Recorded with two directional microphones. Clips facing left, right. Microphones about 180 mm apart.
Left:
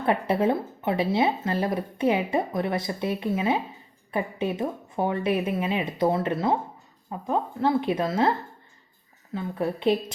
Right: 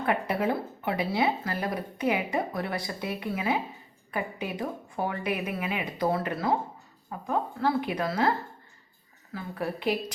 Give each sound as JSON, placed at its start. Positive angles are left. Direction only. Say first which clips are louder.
{"t": 0.0, "sound": "speech", "louder": "left 4 dB", "side_deg": 30}
{"t": 9.3, "sound": "speech", "louder": "left 5 dB", "side_deg": 25}